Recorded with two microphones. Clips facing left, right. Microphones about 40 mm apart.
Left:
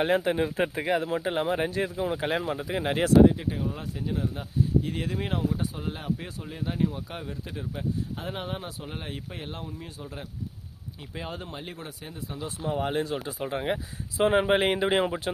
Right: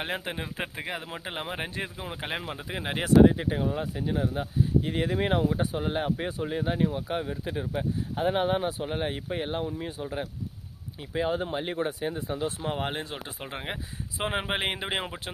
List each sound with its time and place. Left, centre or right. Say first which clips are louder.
0.0 s speech: left 9 dB; centre
1.0 s speech: left 8 dB; centre
3.2 s speech: right 1 dB; right
11.1 s speech: right 9 dB; centre
12.6 s speech: left 6 dB; right
12.9 s speech: left 6 dB; right
14.2 s speech: left 7 dB; centre